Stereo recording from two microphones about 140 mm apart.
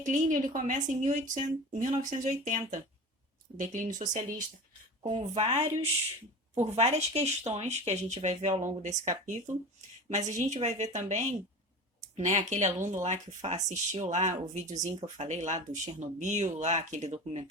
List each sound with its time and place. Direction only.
0.0 s speech: 65° right (ahead or behind)
5.0 s speech: 40° right (ahead or behind)